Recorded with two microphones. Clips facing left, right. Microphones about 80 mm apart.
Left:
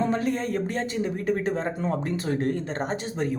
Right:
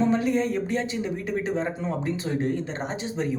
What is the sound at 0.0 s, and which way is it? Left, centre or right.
Speech, left.